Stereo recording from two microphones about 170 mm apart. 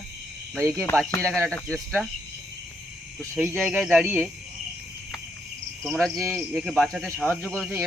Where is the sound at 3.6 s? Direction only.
5° right (ahead or behind).